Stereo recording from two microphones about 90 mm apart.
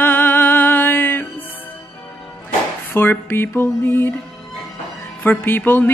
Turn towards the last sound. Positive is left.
turn(degrees=25)  # may be behind; listen again after turning